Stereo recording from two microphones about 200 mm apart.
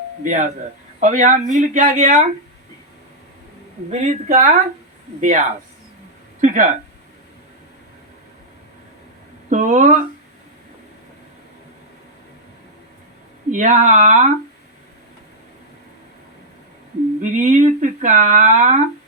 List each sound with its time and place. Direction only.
0.2 s speech: 40° right (ahead or behind)
4.3 s speech: 35° right (ahead or behind)
9.5 s speech: 40° right (ahead or behind)
13.5 s speech: 40° right (ahead or behind)
17.2 s speech: 40° right (ahead or behind)